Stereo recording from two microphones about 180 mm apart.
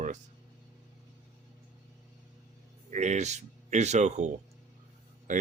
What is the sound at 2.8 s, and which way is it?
Speech, 40° right (ahead or behind).